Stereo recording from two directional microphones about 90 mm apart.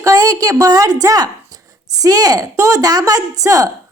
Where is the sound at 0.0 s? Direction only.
40° right (ahead or behind).